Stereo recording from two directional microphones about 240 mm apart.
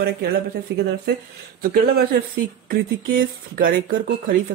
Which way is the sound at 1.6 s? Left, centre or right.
Right.